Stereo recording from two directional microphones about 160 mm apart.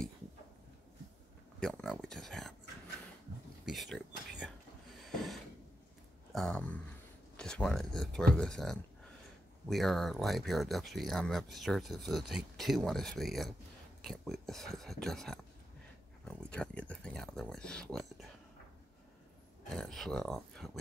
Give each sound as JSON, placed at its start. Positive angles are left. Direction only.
{"t": 1.6, "sound": "speech", "side_deg": 5}
{"t": 3.6, "sound": "speech", "side_deg": 0}
{"t": 5.0, "sound": "a sound", "side_deg": 0}
{"t": 6.3, "sound": "speech", "side_deg": 5}
{"t": 19.7, "sound": "speech", "side_deg": 5}